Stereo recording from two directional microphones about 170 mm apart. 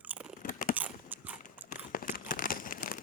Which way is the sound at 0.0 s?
10° right (ahead or behind).